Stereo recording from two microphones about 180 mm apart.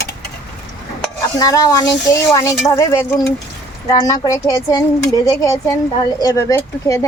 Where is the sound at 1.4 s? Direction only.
20° left (ahead or behind).